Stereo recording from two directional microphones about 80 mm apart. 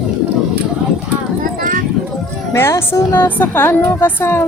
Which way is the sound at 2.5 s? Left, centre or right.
Left.